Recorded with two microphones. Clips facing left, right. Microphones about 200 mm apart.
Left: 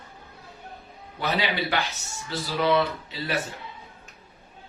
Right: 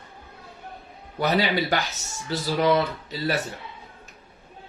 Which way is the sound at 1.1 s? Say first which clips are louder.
Right 4 dB; 45° right (ahead or behind).